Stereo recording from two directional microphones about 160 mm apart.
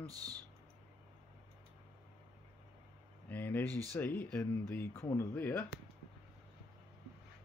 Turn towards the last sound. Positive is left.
turn(degrees=15)  # may be behind; listen again after turning